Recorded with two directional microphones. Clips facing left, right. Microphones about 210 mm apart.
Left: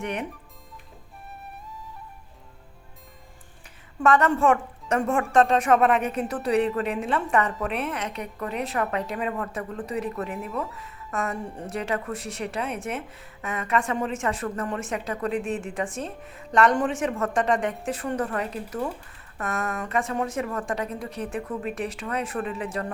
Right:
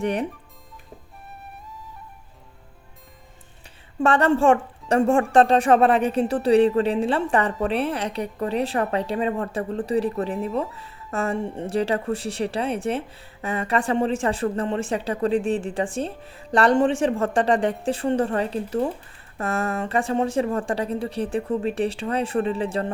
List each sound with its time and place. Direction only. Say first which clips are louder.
0.0 s speech: right 6 dB; 35° right (ahead or behind)
1.3 s flute: even; centre (ahead or behind)
4.0 s speech: right 2 dB; 30° right (ahead or behind)